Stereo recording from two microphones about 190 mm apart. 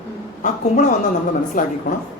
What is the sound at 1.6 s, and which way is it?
Speech, 45° left (ahead or behind).